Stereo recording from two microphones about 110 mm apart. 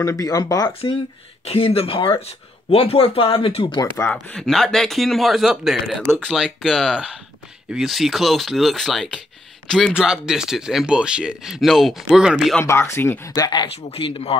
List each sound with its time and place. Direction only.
0.0 s speech: 30° left (ahead or behind)
1.4 s speech: 65° left (ahead or behind)
4.1 s speech: 5° left (ahead or behind)
12.6 s speech: 25° left (ahead or behind)
13.3 s speech: 40° left (ahead or behind)
13.8 s speech: 55° left (ahead or behind)